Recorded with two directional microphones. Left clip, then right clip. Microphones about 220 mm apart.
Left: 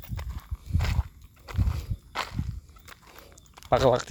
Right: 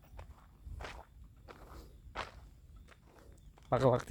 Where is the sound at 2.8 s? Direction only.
45° left (ahead or behind).